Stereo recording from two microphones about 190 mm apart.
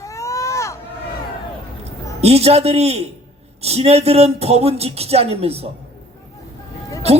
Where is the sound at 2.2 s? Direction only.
35° right (ahead or behind).